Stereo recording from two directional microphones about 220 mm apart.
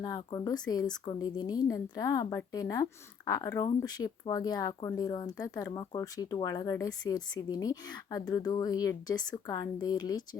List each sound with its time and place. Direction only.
0.0 s speech: 15° left (ahead or behind)